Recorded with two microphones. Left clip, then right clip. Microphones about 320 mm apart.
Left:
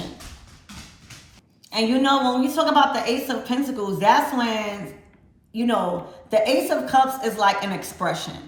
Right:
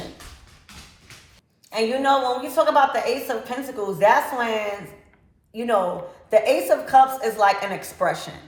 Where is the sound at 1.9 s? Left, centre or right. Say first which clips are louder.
Even; centre.